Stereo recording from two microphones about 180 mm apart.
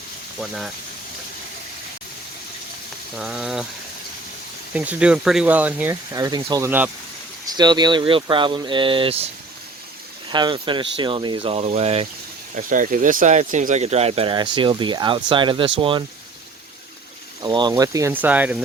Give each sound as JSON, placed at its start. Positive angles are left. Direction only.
{"t": 0.3, "sound": "speech", "side_deg": 0}
{"t": 3.2, "sound": "speech", "side_deg": -5}
{"t": 4.7, "sound": "speech", "side_deg": -5}
{"t": 6.1, "sound": "speech", "side_deg": -20}
{"t": 6.7, "sound": "speech", "side_deg": -10}
{"t": 7.4, "sound": "speech", "side_deg": -25}
{"t": 10.3, "sound": "speech", "side_deg": -25}
{"t": 12.5, "sound": "speech", "side_deg": -45}
{"t": 17.4, "sound": "speech", "side_deg": -25}